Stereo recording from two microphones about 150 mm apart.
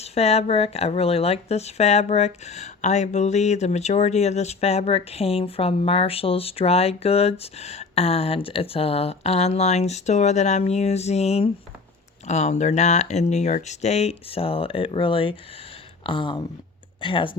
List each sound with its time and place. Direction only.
0.0 s speech: 45° left (ahead or behind)